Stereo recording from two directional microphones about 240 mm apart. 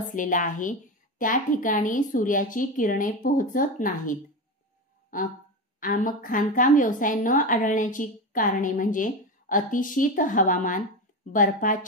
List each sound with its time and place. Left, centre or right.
0.0 s a woman's voice: left